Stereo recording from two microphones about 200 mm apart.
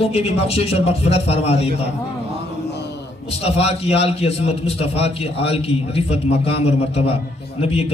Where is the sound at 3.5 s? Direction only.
30° left (ahead or behind).